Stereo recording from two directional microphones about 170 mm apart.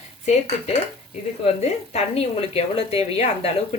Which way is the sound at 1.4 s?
40° left (ahead or behind).